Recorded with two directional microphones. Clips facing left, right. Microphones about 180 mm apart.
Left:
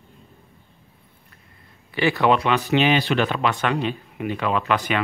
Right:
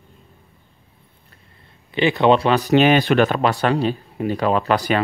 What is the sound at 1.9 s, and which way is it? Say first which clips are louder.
Speech: right 4 dB; 20° right (ahead or behind).